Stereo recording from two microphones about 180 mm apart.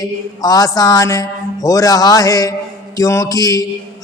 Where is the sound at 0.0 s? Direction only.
20° left (ahead or behind).